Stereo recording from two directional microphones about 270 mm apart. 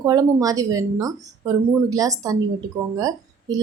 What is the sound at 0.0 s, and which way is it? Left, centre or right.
A woman's voice, centre.